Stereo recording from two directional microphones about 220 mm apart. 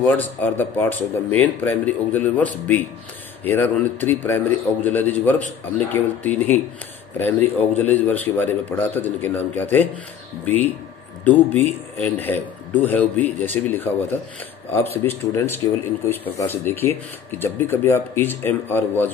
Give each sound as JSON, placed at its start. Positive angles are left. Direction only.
{"t": 0.0, "sound": "speech", "side_deg": 10}
{"t": 11.2, "sound": "speech", "side_deg": 5}